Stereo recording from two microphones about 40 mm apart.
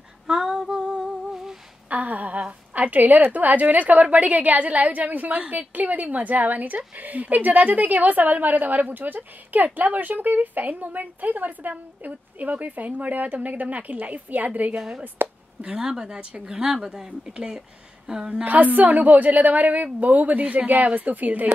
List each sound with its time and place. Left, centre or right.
0.3 s female singing: centre
1.9 s a sound: right
2.7 s a woman's voice: right
15.2 s speech: right
15.8 s a woman's voice: centre
18.4 s a woman's voice: right